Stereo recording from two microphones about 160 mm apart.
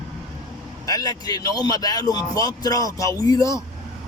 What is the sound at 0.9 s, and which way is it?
Speech, 25° left (ahead or behind).